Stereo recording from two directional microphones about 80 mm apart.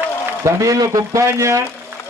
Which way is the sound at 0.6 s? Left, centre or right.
Right.